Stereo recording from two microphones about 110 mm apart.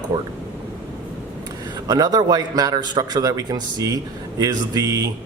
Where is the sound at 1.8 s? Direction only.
35° right (ahead or behind).